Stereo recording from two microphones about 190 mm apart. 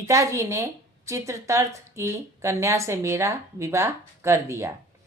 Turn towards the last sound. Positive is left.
turn(degrees=-15)  # may be behind; listen again after turning